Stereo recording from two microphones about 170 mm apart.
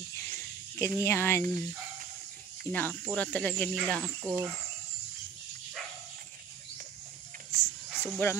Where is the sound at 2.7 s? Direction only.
10° left (ahead or behind).